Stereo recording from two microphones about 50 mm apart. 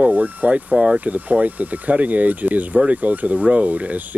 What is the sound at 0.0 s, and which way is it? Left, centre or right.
Speech, right.